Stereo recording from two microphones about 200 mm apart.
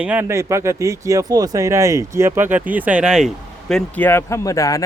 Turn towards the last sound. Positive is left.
turn(degrees=15)  # may be behind; listen again after turning